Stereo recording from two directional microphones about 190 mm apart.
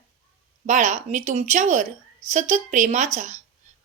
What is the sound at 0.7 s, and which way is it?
A woman's voice, 40° right (ahead or behind).